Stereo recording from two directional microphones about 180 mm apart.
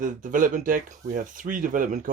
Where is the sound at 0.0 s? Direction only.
45° right (ahead or behind).